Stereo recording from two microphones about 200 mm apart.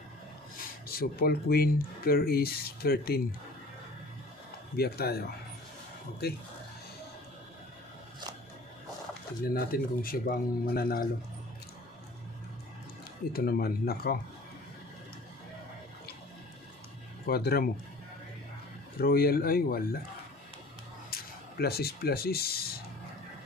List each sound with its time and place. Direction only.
0.6 s speech: 50° left (ahead or behind)
4.7 s speech: 50° left (ahead or behind)
6.2 s speech: 50° left (ahead or behind)
9.5 s speech: 50° left (ahead or behind)
13.3 s speech: 50° left (ahead or behind)
17.3 s speech: 50° left (ahead or behind)
18.9 s speech: 50° left (ahead or behind)
21.1 s a sound: 50° left (ahead or behind)
21.5 s speech: 50° left (ahead or behind)